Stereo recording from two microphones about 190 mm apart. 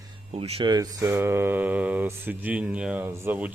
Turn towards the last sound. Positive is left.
turn(degrees=-10)  # may be behind; listen again after turning